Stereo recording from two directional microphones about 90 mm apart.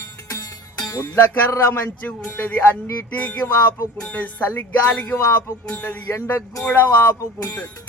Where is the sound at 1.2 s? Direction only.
25° left (ahead or behind).